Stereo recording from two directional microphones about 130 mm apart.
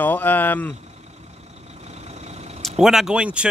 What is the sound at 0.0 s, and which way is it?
Speech, 15° left (ahead or behind).